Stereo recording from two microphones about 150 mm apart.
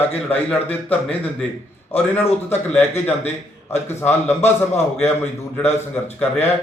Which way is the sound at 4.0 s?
15° left (ahead or behind).